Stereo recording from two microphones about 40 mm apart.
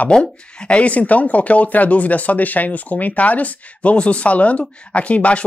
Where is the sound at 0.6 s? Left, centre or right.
Left.